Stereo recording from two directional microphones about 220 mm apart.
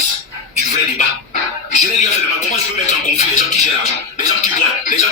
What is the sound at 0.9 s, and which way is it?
Speech, 35° left (ahead or behind).